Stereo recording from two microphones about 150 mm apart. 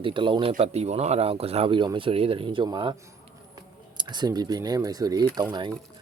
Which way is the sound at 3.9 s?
30° right (ahead or behind).